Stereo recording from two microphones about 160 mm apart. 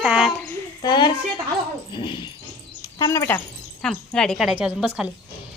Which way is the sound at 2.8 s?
20° left (ahead or behind).